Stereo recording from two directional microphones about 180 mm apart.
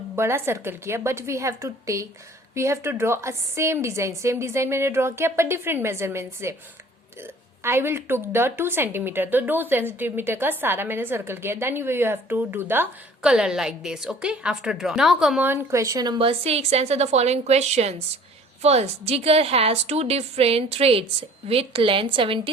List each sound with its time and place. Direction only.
0.2 s a woman's voice: 15° right (ahead or behind); by 22.4 s 30° right (ahead or behind)